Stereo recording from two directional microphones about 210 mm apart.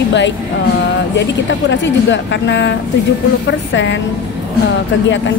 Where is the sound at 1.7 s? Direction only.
60° left (ahead or behind).